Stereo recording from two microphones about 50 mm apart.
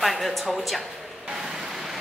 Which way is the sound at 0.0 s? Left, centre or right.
Centre.